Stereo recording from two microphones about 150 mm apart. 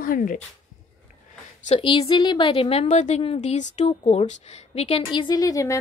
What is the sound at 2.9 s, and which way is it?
A woman's voice, 50° left (ahead or behind).